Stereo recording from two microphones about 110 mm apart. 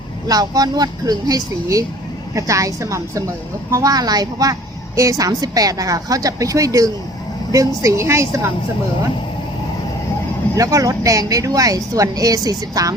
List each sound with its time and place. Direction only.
0.3 s a woman's voice: 35° right (ahead or behind)
10.5 s speech: 30° right (ahead or behind)